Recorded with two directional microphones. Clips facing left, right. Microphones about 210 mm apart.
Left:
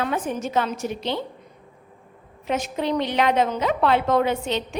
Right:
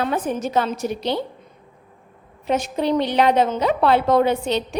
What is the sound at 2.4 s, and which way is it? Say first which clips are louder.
A woman's voice: right 4 dB; 35° right (ahead or behind).